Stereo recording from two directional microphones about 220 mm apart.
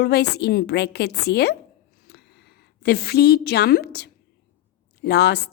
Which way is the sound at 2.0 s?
45° left (ahead or behind).